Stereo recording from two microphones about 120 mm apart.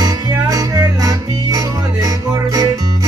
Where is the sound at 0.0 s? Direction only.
30° right (ahead or behind).